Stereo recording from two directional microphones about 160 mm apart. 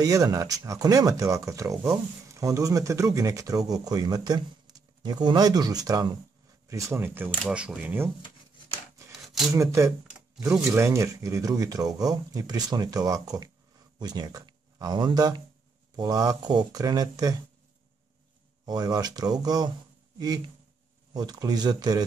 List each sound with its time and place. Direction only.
0.0 s speech: 20° right (ahead or behind)
6.7 s speech: 15° right (ahead or behind)
9.5 s speech: 20° right (ahead or behind)
18.7 s speech: 25° right (ahead or behind)